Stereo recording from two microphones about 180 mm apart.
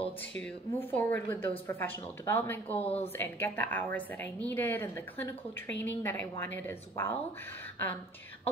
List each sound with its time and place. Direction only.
0.4 s a woman's voice: 10° left (ahead or behind)
2.8 s a woman's voice: 35° left (ahead or behind)
3.1 s a woman's voice: 10° left (ahead or behind)